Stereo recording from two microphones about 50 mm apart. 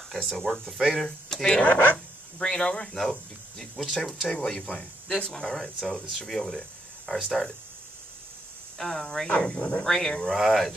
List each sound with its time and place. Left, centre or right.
0.1 s speech: centre
1.6 s speech: left
2.3 s speech: centre
4.4 s speech: centre
8.7 s speech: centre
9.8 s speech: centre
10.3 s speech: centre